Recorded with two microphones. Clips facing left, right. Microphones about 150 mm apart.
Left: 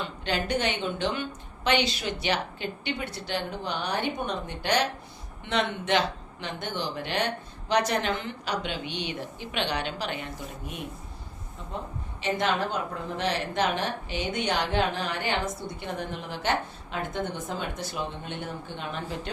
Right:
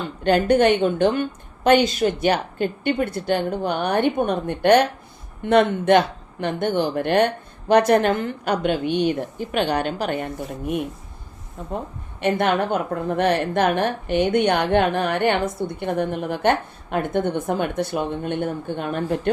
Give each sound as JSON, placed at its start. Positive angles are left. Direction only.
{"t": 0.3, "sound": "a woman's voice", "side_deg": -50}
{"t": 12.2, "sound": "a woman's voice", "side_deg": -60}